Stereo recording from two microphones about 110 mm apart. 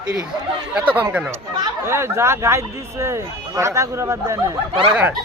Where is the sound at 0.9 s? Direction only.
10° right (ahead or behind).